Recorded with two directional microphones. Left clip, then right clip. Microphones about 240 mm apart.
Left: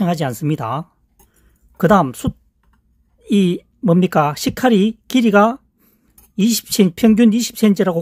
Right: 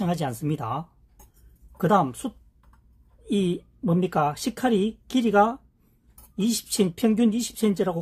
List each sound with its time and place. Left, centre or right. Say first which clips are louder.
0.0 s speech: left 8 dB; left